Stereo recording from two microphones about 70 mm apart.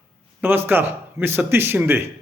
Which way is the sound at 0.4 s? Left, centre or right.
Right.